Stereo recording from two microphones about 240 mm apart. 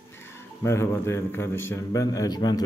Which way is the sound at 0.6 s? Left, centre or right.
Centre.